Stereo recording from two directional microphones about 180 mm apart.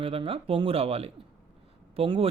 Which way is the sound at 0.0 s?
30° right (ahead or behind).